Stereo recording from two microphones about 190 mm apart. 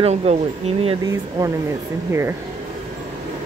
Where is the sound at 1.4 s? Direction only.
20° right (ahead or behind).